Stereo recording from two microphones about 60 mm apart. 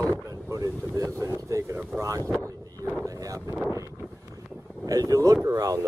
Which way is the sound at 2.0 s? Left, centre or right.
Right.